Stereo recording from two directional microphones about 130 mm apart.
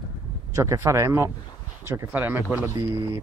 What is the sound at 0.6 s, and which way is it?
Speech, 25° right (ahead or behind).